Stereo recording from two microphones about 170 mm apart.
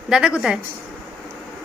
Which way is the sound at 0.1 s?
5° right (ahead or behind).